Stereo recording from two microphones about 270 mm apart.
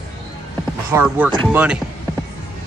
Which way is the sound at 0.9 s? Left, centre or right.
Centre.